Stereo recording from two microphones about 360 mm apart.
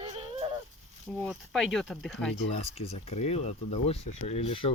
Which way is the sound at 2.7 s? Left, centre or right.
Centre.